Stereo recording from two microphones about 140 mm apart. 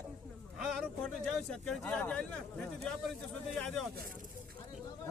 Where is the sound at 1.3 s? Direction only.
5° left (ahead or behind).